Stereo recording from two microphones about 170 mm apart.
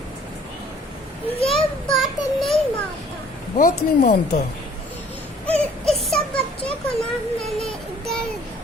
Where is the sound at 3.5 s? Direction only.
45° left (ahead or behind).